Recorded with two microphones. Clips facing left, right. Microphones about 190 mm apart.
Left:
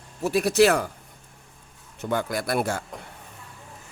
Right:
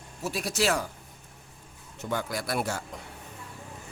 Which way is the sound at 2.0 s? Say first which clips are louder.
Left 5 dB; 55° left (ahead or behind).